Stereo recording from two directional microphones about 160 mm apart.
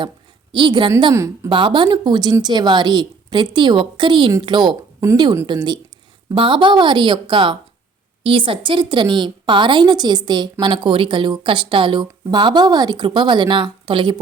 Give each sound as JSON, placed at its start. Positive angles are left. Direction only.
{"t": 0.5, "sound": "a woman's voice", "side_deg": -30}
{"t": 1.5, "sound": "a woman's voice", "side_deg": -30}